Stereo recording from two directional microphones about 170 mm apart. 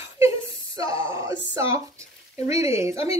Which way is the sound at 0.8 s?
20° right (ahead or behind).